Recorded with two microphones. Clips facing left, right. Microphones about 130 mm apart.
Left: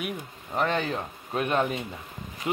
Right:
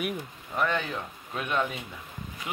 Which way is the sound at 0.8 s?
40° left (ahead or behind).